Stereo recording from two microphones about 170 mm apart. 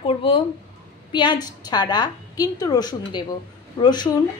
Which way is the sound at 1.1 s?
25° left (ahead or behind).